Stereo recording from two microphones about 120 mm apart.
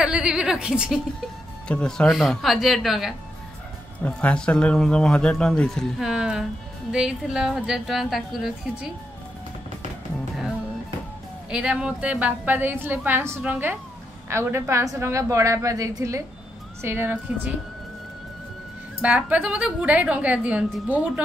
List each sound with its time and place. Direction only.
0.0 s a woman's voice: 5° right (ahead or behind)
1.7 s a woman's voice: 10° left (ahead or behind)
4.0 s a woman's voice: 10° left (ahead or behind)
11.5 s a woman's voice: 10° right (ahead or behind)
18.9 s a woman's voice: 10° right (ahead or behind)